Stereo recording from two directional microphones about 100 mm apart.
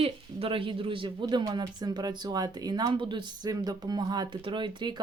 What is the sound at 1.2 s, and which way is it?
Speech, 40° right (ahead or behind).